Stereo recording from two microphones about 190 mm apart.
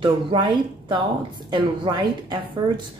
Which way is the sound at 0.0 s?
25° right (ahead or behind).